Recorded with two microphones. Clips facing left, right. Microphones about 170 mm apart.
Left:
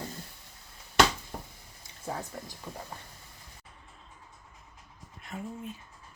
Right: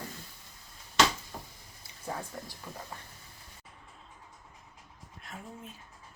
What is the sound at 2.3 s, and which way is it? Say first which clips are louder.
Speech: left 1 dB; 5° left (ahead or behind).